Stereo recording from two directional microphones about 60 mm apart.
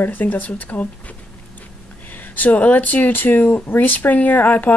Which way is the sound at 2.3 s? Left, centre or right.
Left.